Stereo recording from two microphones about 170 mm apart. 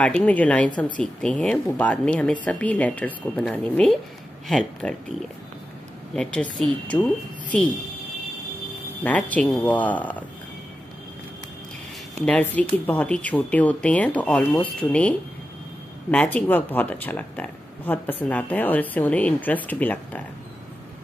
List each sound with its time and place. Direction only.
0.0 s speech: 5° left (ahead or behind)
0.7 s a woman's voice: 25° left (ahead or behind)
0.9 s speech: 5° left (ahead or behind)
6.1 s speech: 5° left (ahead or behind)
9.0 s speech: 10° left (ahead or behind)
12.3 s speech: 10° left (ahead or behind)